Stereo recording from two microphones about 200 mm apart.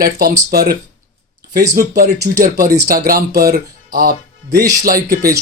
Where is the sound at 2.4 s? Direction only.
45° right (ahead or behind).